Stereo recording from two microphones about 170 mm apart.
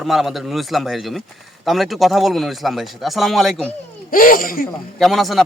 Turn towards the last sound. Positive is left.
turn(degrees=0)  # may be behind; listen again after turning